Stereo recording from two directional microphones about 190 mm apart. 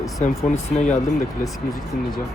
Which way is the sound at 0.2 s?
40° left (ahead or behind).